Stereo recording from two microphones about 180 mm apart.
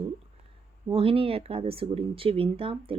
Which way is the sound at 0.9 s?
30° right (ahead or behind).